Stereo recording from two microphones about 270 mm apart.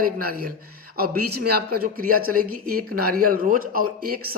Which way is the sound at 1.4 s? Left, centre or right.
Right.